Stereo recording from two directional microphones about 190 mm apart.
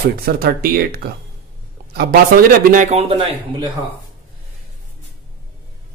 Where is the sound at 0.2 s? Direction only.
55° right (ahead or behind).